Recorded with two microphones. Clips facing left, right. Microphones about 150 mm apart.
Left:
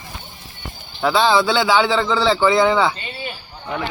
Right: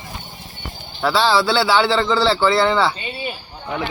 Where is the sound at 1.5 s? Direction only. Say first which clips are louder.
Even; 10° left (ahead or behind).